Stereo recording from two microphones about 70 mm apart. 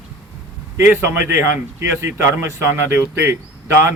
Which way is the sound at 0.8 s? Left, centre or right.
Right.